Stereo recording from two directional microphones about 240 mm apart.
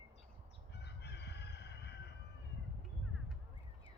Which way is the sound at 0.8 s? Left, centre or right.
Left.